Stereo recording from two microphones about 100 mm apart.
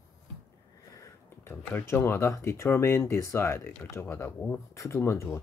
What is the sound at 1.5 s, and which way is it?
Speech, 20° left (ahead or behind).